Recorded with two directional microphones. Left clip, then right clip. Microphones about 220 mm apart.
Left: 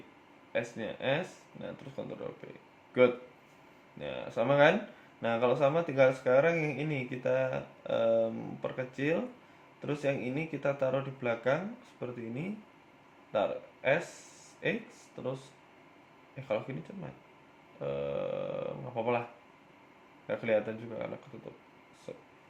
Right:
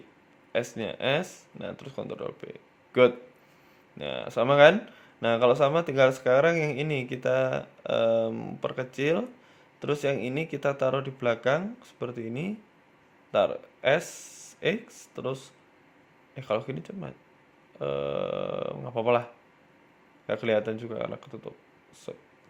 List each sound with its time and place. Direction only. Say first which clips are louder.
0.5 s speech: right 5 dB; 50° right (ahead or behind)
3.9 s speech: right 5 dB; 50° right (ahead or behind)
20.2 s speech: right 4 dB; 50° right (ahead or behind)